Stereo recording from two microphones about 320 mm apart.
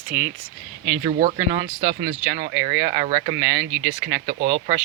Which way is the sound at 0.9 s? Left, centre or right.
Right.